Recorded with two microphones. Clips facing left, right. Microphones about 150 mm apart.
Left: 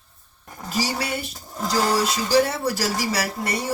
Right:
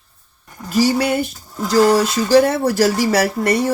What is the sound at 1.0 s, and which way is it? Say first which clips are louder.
Speech: right 10 dB; 60° right (ahead or behind).